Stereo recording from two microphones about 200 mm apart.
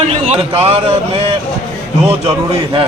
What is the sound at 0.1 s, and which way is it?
Speech, 30° right (ahead or behind).